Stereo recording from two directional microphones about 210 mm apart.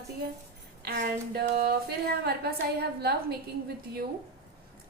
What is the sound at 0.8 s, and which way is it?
A woman's voice, 50° right (ahead or behind).